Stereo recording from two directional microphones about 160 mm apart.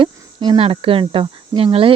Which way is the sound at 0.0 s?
35° right (ahead or behind).